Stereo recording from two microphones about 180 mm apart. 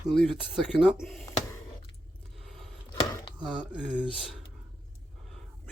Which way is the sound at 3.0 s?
25° left (ahead or behind).